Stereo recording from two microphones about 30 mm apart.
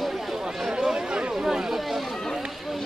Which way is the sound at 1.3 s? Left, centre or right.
Centre.